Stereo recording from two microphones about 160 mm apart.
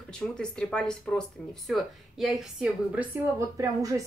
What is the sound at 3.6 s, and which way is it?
Speech, 20° right (ahead or behind).